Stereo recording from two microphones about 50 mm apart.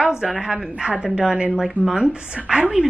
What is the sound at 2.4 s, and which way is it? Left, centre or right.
Speech, centre.